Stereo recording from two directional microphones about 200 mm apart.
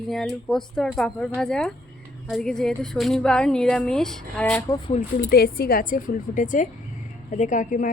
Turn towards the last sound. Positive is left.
turn(degrees=40)  # may be behind; listen again after turning